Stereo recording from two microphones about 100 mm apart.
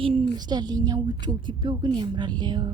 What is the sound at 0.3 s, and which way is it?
A woman's voice, 45° right (ahead or behind).